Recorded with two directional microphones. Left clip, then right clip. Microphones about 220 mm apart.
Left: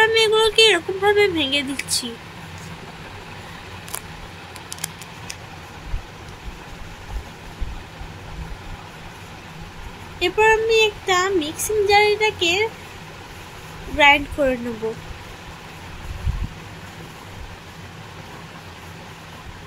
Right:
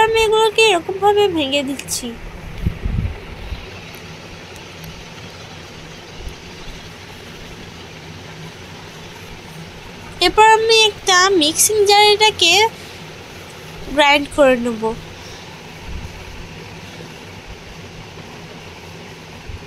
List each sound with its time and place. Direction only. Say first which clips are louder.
0.0 s speech: right 2 dB; 5° right (ahead or behind)
10.1 s speech: right 6 dB; 10° right (ahead or behind)
13.9 s speech: right 2 dB; 10° right (ahead or behind)